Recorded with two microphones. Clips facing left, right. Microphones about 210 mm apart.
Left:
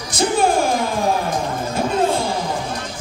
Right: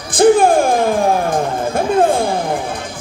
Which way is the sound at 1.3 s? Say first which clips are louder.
Right 5 dB; 55° right (ahead or behind).